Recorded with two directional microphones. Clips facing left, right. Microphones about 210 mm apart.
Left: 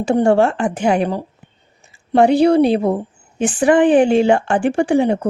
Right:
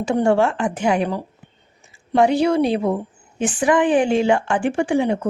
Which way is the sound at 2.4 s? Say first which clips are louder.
Left 5 dB; 30° left (ahead or behind).